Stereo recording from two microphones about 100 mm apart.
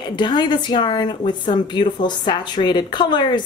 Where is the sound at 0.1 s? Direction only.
50° left (ahead or behind).